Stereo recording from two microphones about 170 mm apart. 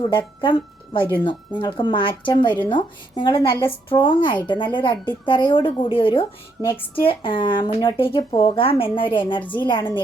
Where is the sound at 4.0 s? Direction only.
30° left (ahead or behind).